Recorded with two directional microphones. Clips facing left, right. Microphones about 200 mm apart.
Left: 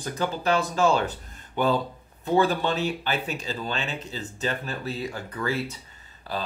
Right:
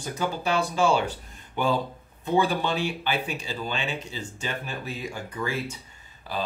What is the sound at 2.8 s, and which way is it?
Speech, 40° left (ahead or behind).